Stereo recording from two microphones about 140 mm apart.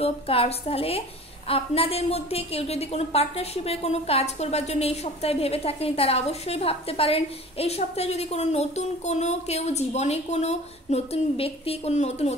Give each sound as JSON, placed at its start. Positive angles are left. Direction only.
{"t": 0.0, "sound": "a woman's voice", "side_deg": 45}